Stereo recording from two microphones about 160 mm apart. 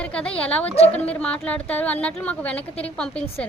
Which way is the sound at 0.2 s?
5° left (ahead or behind).